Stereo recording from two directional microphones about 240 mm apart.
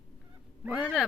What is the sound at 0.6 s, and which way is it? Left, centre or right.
Speech, centre.